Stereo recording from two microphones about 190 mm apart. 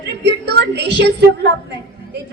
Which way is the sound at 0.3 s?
60° right (ahead or behind).